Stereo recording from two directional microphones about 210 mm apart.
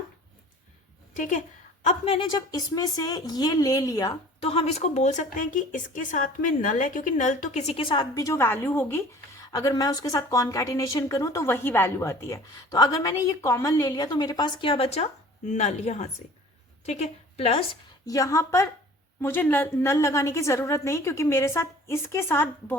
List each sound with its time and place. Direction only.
1.1 s a woman's voice: 35° left (ahead or behind)
18.0 s a woman's voice: 15° left (ahead or behind)